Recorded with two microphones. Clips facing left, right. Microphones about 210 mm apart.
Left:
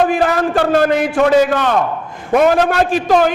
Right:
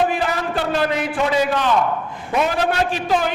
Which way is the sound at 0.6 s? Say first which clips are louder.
Left 7 dB; 50° left (ahead or behind).